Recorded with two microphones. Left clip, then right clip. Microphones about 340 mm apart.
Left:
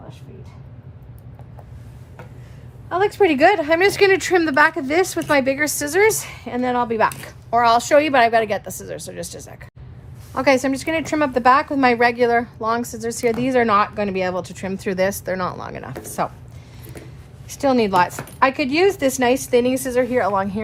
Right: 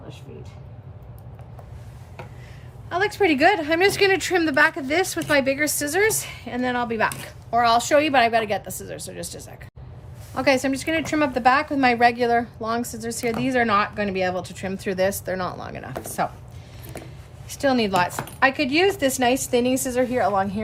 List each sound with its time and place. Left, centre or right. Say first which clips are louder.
2.9 s speech: left 4 dB; centre
17.5 s speech: left 4 dB; centre